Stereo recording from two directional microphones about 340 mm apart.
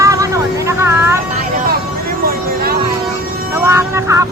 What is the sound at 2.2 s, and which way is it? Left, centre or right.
Vehicle, right.